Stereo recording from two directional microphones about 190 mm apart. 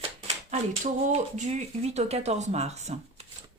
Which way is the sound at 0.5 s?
35° right (ahead or behind).